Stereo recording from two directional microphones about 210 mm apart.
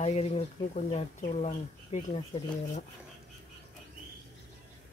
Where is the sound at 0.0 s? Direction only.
30° left (ahead or behind).